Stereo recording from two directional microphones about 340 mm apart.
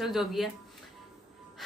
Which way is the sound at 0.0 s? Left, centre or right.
Centre.